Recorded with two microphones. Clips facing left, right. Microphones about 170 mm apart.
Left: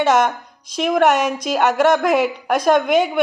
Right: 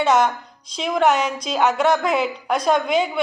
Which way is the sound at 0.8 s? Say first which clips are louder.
Left 3 dB; 55° left (ahead or behind).